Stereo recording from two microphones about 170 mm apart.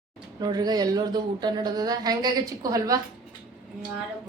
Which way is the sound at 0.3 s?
25° right (ahead or behind).